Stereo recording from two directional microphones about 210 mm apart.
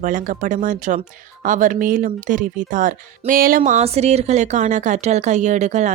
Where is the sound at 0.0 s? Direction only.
40° right (ahead or behind).